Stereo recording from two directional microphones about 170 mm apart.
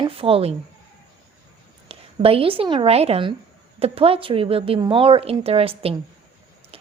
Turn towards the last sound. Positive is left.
turn(degrees=-35)  # may be behind; listen again after turning